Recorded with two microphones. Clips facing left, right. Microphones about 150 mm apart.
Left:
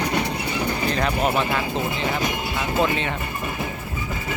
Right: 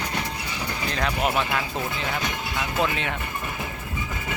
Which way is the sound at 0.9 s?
5° left (ahead or behind).